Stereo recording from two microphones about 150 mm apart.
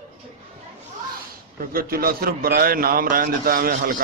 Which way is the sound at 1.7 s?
80° right.